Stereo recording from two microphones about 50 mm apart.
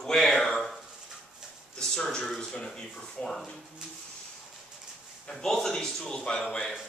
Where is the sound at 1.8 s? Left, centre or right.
Centre.